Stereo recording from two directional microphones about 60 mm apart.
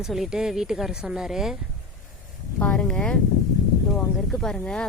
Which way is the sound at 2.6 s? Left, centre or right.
Left.